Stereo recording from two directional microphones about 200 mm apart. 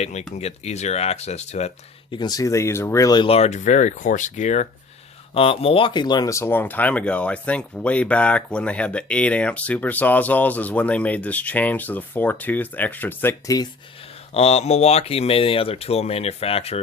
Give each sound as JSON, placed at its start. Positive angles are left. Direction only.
{"t": 0.0, "sound": "speech", "side_deg": 35}
{"t": 2.1, "sound": "speech", "side_deg": 20}
{"t": 14.3, "sound": "speech", "side_deg": 30}